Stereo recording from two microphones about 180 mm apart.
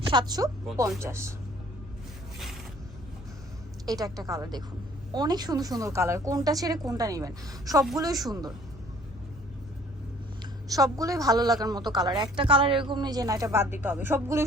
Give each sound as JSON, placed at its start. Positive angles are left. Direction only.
{"t": 0.1, "sound": "a woman's voice", "side_deg": -25}
{"t": 3.8, "sound": "a woman's voice", "side_deg": -20}
{"t": 10.4, "sound": "a woman's voice", "side_deg": -20}